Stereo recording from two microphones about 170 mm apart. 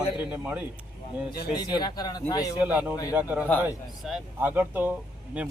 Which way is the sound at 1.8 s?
25° left (ahead or behind).